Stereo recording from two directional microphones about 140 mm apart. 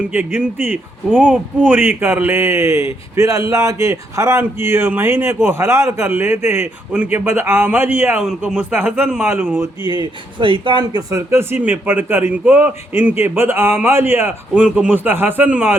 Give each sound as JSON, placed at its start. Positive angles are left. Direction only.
{"t": 0.1, "sound": "a man's voice", "side_deg": -15}
{"t": 9.8, "sound": "speech", "side_deg": -30}
{"t": 11.1, "sound": "a man's voice", "side_deg": -20}